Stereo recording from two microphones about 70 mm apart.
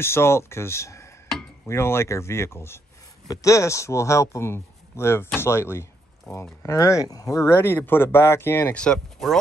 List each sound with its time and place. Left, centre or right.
0.0 s speech: left
3.3 s speech: left
7.5 s speech: left
8.7 s speech: centre